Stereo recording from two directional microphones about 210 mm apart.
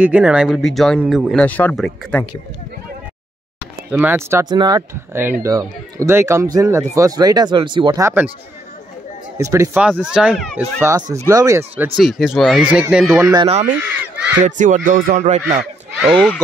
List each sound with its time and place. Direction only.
0.0 s speech: 5° right (ahead or behind)
3.9 s a man's voice: 10° right (ahead or behind)
9.4 s a man's voice: 15° right (ahead or behind)
10.8 s a man's voice: 15° right (ahead or behind)
11.8 s speech: centre (ahead or behind)
13.3 s speech: 20° right (ahead or behind)
13.7 s a man's voice: 10° right (ahead or behind)
14.4 s speech: 35° right (ahead or behind)
15.9 s speech: centre (ahead or behind)